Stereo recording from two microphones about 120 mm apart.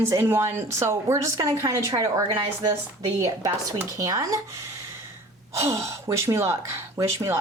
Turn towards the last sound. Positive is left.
turn(degrees=-25)  # may be behind; listen again after turning